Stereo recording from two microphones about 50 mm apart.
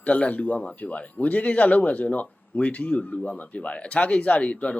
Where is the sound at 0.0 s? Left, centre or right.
Left.